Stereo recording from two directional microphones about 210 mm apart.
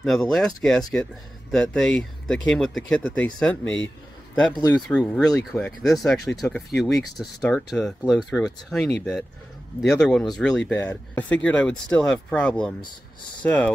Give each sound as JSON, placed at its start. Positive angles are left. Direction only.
{"t": 0.0, "sound": "speech", "side_deg": 0}
{"t": 4.6, "sound": "speech", "side_deg": 20}
{"t": 4.8, "sound": "speech", "side_deg": 5}